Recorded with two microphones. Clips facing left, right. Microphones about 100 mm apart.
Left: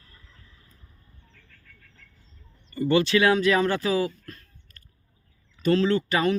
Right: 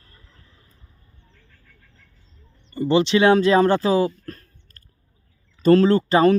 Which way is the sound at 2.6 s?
25° right (ahead or behind).